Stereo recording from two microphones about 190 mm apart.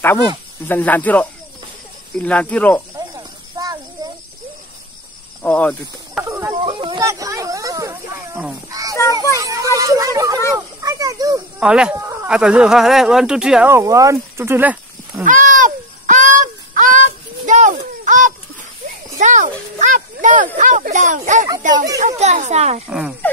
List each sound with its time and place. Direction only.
0.7 s speech: 10° left (ahead or behind)
3.2 s a sound: 20° right (ahead or behind)
5.4 s speech: 5° left (ahead or behind)
6.2 s speech: 15° right (ahead or behind)
6.6 s a sound: 30° right (ahead or behind)
7.0 s snake: 15° right (ahead or behind)
8.6 s a child's voice: 20° right (ahead or behind)
10.5 s a sound: 20° right (ahead or behind)
11.6 s speech: 5° right (ahead or behind)
15.2 s a sound: 45° right (ahead or behind)
19.1 s a child's voice: 40° right (ahead or behind)
21.7 s speech: 20° right (ahead or behind)
22.2 s speech: 35° right (ahead or behind)
22.8 s speech: 5° right (ahead or behind)